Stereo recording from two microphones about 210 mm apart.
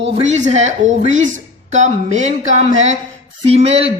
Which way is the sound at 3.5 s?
30° right (ahead or behind).